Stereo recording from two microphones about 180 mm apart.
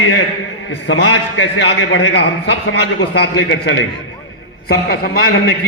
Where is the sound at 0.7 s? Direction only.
85° left.